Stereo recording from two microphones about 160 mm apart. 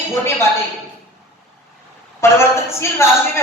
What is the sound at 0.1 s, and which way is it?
Speech, 15° left (ahead or behind).